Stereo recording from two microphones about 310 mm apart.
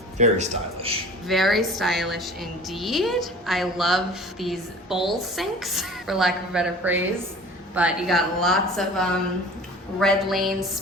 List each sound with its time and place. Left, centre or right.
0.2 s a man's voice: centre
1.3 s a woman's voice: centre